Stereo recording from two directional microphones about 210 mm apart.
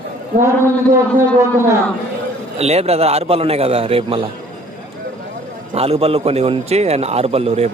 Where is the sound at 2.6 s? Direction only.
30° right (ahead or behind).